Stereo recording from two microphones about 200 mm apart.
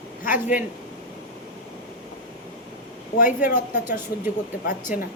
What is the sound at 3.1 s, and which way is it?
Speech, 40° left (ahead or behind).